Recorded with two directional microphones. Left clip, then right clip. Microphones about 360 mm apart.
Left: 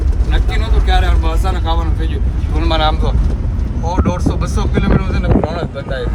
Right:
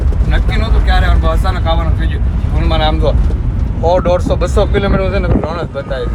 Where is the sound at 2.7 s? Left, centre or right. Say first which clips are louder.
Even; left.